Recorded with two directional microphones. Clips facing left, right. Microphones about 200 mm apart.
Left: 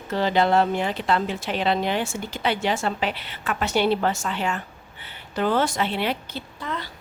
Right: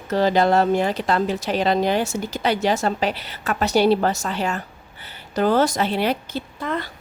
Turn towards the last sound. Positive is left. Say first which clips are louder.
# right 5 dB
turn(degrees=-50)  # may be behind; listen again after turning